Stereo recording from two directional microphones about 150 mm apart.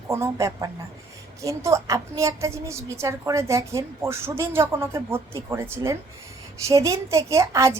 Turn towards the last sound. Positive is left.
turn(degrees=-20)  # may be behind; listen again after turning